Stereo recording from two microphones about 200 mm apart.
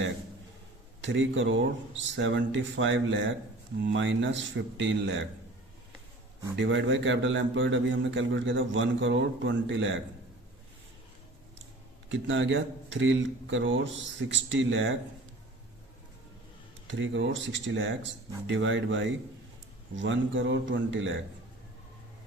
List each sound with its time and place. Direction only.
1.0 s a man's voice: 70° right (ahead or behind)
6.6 s a man's voice: 65° right (ahead or behind)
12.0 s a man's voice: 70° right (ahead or behind)
16.8 s a man's voice: 70° right (ahead or behind)